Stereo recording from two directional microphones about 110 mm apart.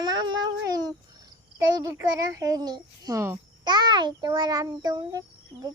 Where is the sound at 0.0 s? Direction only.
40° right (ahead or behind).